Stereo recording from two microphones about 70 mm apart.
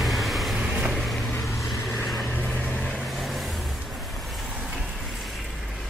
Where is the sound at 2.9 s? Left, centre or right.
Centre.